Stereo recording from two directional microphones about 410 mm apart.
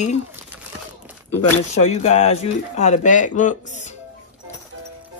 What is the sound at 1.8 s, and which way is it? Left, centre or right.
Speech, centre.